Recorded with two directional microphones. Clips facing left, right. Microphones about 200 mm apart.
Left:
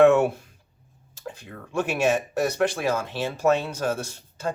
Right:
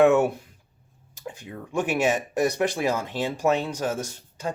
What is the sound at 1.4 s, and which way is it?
Speech, 15° right (ahead or behind).